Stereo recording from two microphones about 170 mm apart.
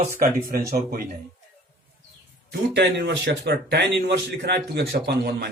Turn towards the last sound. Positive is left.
turn(degrees=-65)  # may be behind; listen again after turning